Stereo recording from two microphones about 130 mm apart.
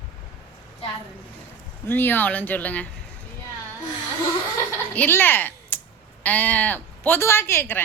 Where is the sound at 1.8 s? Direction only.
15° left (ahead or behind).